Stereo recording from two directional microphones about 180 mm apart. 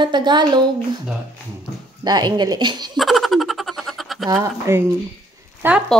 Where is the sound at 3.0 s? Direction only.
Centre (ahead or behind).